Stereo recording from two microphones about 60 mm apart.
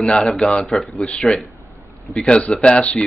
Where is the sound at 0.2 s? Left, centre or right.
Centre.